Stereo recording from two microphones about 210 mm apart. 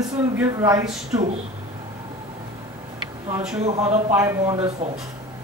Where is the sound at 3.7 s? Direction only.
30° right (ahead or behind).